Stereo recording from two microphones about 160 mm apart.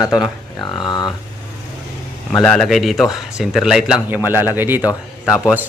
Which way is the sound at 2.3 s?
5° left (ahead or behind).